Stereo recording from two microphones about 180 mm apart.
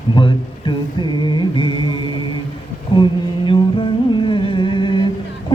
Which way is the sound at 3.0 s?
25° left (ahead or behind).